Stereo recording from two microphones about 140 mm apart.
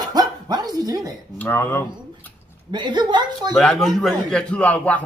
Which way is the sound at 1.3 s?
15° left (ahead or behind).